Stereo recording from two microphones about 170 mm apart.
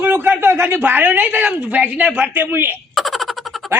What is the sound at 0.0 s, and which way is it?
Speech, 10° right (ahead or behind).